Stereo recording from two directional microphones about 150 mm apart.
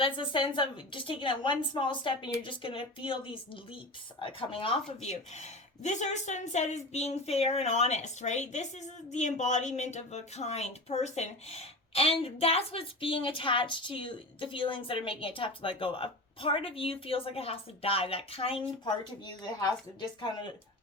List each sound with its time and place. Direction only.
0.0 s speech: 35° left (ahead or behind)
19.2 s speech: 30° left (ahead or behind)